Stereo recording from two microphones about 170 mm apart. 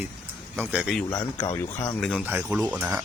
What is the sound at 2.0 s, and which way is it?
Speech, 5° left (ahead or behind).